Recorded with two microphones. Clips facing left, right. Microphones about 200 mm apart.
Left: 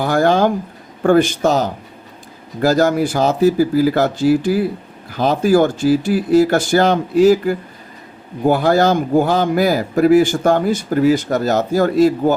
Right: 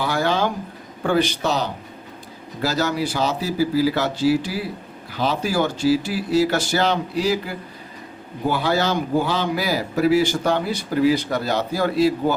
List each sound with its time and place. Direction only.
0.0 s speech: 50° left (ahead or behind)